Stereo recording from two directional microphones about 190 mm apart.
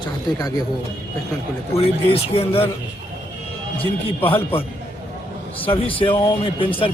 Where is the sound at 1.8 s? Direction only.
30° left (ahead or behind).